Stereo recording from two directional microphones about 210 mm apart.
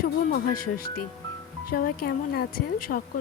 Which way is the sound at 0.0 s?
40° left (ahead or behind).